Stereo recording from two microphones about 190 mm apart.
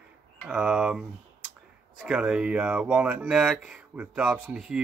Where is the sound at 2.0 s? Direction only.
5° right (ahead or behind).